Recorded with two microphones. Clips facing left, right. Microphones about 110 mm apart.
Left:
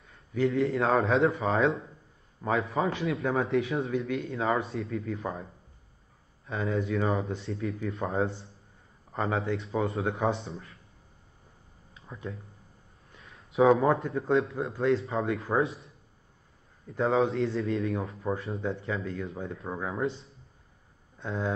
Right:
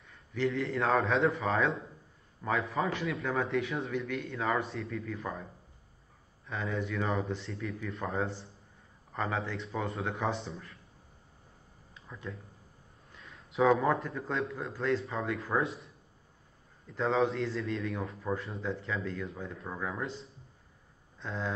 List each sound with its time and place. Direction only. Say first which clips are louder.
0.4 s speech: left 5 dB; 30° left (ahead or behind)
2.7 s speech: left 4 dB; 30° left (ahead or behind)
6.4 s speech: left 5 dB; 30° left (ahead or behind)
13.2 s a man's voice: left 4 dB; 30° left (ahead or behind)
15.6 s speech: left 4 dB; centre (ahead or behind)
17.1 s a man's voice: left 3 dB; 30° left (ahead or behind)